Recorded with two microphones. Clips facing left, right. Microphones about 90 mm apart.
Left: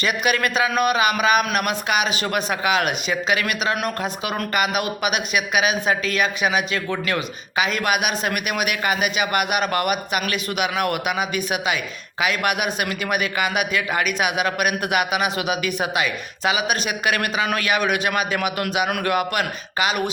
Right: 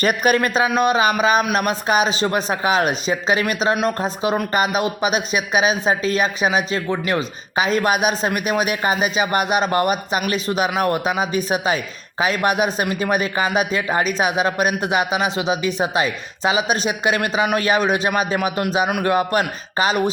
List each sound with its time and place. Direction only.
0.0 s a man's voice: 45° right (ahead or behind)
0.3 s a man's voice: 30° right (ahead or behind)
0.8 s a sound: 30° right (ahead or behind)
1.2 s a man's voice: 30° right (ahead or behind)
17.6 s a man's voice: 30° right (ahead or behind)